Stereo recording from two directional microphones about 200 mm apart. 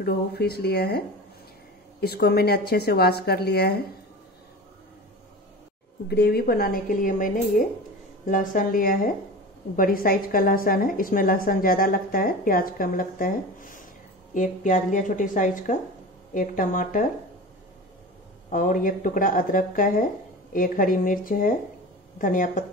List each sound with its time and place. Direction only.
0.0 s a woman's voice: 50° left (ahead or behind)
6.0 s a woman's voice: 50° left (ahead or behind)
18.5 s a woman's voice: 40° left (ahead or behind)